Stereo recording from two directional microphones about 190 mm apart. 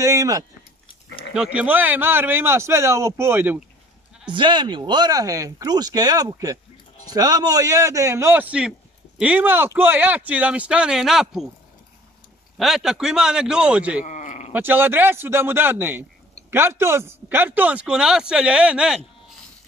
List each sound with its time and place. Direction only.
0.0 s speech: 15° right (ahead or behind)
1.3 s speech: 5° right (ahead or behind)
4.3 s speech: 25° right (ahead or behind); by 11.4 s centre (ahead or behind)
12.5 s a man's voice: centre (ahead or behind)
14.0 s a sound: 40° left (ahead or behind)
14.5 s speech: 10° right (ahead or behind)